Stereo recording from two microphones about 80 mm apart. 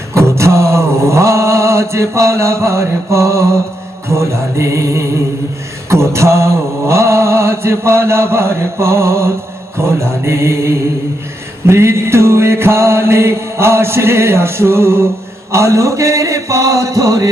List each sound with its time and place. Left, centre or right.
0.1 s mantra: right